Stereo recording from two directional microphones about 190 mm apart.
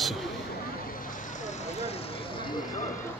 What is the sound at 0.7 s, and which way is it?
Vehicle, 50° left (ahead or behind).